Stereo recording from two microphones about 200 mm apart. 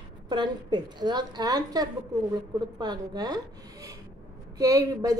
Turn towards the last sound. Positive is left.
turn(degrees=-15)  # may be behind; listen again after turning